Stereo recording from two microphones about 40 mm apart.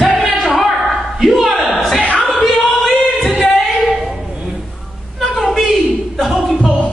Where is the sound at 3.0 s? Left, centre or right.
Centre.